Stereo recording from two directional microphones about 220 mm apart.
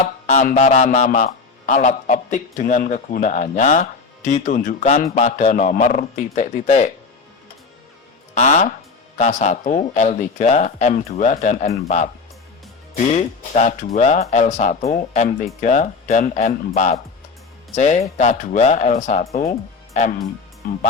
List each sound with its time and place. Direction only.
0.0 s speech: 30° left (ahead or behind)
8.4 s speech: 35° left (ahead or behind)